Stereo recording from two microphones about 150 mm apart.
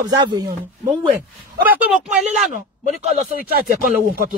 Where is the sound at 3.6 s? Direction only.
80° right.